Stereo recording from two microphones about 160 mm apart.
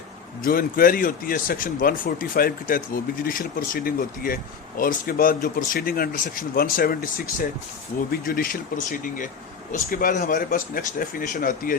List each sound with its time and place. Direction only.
0.4 s speech: 60° left (ahead or behind)